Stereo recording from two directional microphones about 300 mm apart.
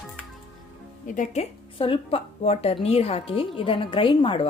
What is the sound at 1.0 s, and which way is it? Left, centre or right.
A woman's voice, left.